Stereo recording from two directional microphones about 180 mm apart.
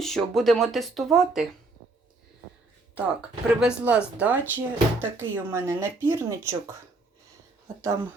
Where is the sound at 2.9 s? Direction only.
5° right (ahead or behind).